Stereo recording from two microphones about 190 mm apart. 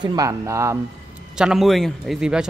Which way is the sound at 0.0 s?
20° right (ahead or behind).